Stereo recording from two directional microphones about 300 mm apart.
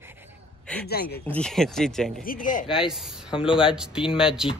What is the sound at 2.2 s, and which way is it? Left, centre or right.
Speech, left.